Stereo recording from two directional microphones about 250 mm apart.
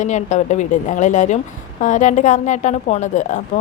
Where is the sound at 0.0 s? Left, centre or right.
Left.